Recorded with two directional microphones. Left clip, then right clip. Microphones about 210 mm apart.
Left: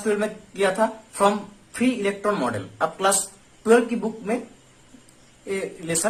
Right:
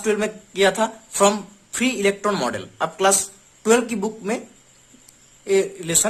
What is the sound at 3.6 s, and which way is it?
Speech, 50° right (ahead or behind).